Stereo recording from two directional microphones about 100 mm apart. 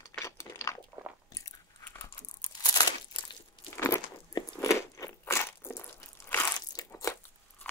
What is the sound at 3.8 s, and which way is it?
Crunch, 25° left (ahead or behind).